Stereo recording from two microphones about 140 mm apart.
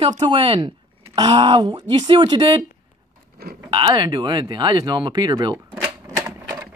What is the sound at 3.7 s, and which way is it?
Speech, 35° right (ahead or behind).